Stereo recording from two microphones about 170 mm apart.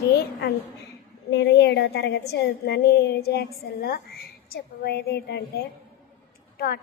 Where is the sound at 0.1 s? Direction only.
70° left (ahead or behind).